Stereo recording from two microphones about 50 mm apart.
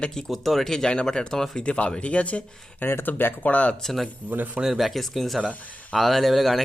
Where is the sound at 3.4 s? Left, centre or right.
Left.